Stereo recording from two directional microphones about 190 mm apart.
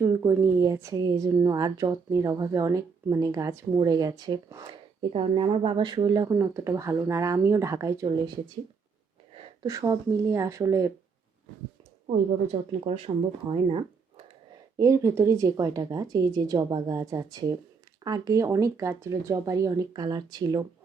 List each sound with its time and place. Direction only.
0.2 s a woman's voice: 15° right (ahead or behind)
9.6 s a woman's voice: 15° right (ahead or behind)
12.5 s speech: 30° right (ahead or behind)
14.8 s a woman's voice: 15° right (ahead or behind)